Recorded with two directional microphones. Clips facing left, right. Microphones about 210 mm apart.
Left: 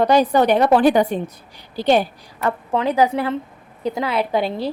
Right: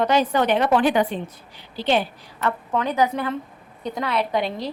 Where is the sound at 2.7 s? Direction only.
30° left (ahead or behind).